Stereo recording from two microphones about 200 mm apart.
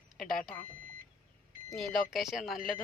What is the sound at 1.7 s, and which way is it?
Speech, centre (ahead or behind).